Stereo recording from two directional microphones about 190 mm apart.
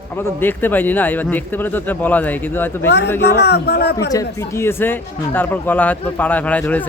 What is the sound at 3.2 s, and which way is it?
Speech, 60° left (ahead or behind).